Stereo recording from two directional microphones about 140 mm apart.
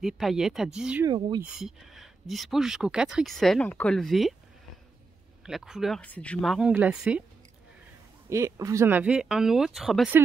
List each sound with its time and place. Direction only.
0.0 s speech: centre (ahead or behind)
1.0 s speech: 30° right (ahead or behind)
1.4 s speech: centre (ahead or behind)
5.4 s speech: 5° right (ahead or behind)
6.0 s speech: 10° left (ahead or behind); by 7.2 s 5° right (ahead or behind)
8.3 s speech: 20° right (ahead or behind); by 10.1 s centre (ahead or behind)